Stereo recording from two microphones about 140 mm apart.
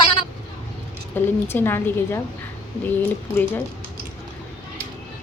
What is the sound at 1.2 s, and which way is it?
A woman's voice, 15° left (ahead or behind).